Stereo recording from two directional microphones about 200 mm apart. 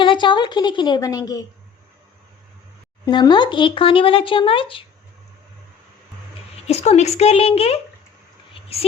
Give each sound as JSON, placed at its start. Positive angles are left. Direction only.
{"t": 0.0, "sound": "speech", "side_deg": 25}
{"t": 3.1, "sound": "speech", "side_deg": 20}
{"t": 6.7, "sound": "a woman's voice", "side_deg": 30}